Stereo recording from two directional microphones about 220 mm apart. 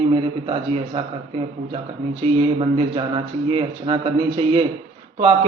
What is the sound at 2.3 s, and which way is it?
Speech, 25° right (ahead or behind).